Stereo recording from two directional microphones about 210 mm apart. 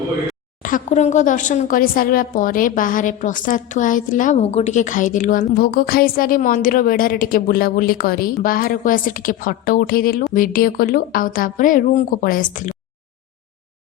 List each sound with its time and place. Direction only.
0.6 s a woman's voice: 35° left (ahead or behind)